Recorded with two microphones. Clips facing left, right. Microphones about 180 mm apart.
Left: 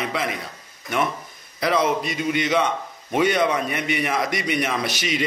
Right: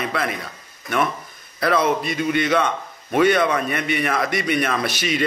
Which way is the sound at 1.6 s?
15° left (ahead or behind).